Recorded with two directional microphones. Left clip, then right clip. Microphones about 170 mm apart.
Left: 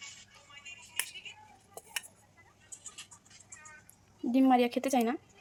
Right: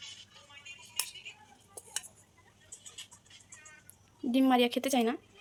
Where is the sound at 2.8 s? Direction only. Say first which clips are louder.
Right 2 dB; 90° left.